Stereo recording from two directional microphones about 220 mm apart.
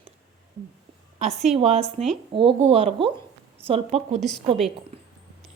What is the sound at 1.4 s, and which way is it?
Speech, 30° right (ahead or behind).